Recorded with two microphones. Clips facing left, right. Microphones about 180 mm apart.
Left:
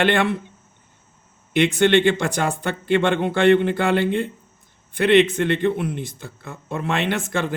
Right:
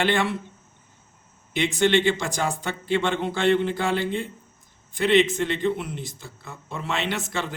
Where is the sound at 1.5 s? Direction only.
60° left (ahead or behind).